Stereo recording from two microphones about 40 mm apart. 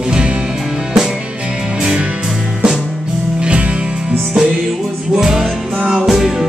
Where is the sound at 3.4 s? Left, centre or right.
Right; by 6.3 s centre.